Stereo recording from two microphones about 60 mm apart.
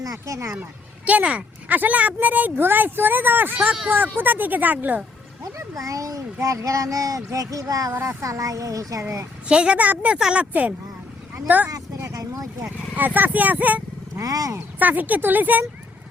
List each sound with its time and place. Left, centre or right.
0.0 s speech: right
1.0 s speech: right
5.4 s speech: right
8.0 s speech: right
9.5 s a woman's voice: centre
9.7 s speech: right
10.2 s a woman's voice: centre
10.5 s speech: right
12.0 s vehicle: right
13.0 s speech: right
14.2 s speech: right
14.8 s speech: right